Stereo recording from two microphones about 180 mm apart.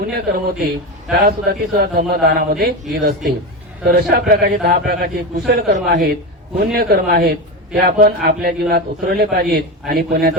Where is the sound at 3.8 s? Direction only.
60° right (ahead or behind).